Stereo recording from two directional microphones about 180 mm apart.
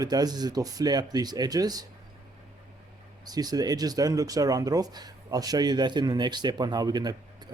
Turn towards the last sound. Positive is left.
turn(degrees=-20)  # may be behind; listen again after turning